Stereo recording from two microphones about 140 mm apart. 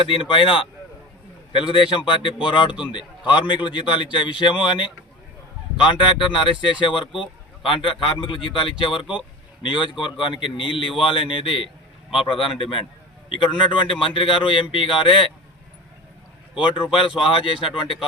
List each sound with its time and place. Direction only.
0.0 s speech: 40° left (ahead or behind)
16.7 s speech: 40° left (ahead or behind)